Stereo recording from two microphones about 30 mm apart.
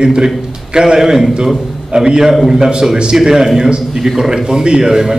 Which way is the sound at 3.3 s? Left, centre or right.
Centre.